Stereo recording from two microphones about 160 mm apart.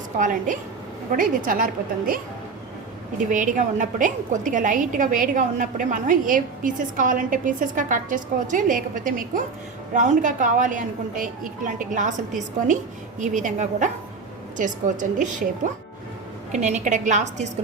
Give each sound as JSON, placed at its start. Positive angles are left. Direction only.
{"t": 0.2, "sound": "a woman's voice", "side_deg": -55}
{"t": 13.1, "sound": "a woman's voice", "side_deg": -50}